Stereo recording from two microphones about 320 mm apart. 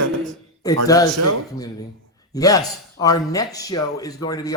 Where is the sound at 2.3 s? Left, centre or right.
Centre.